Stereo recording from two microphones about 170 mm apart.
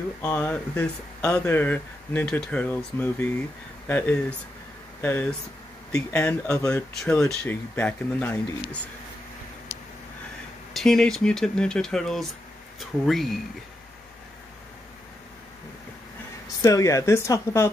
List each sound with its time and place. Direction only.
0.2 s speech: 10° left (ahead or behind)
10.7 s speech: centre (ahead or behind)
16.6 s speech: 20° left (ahead or behind)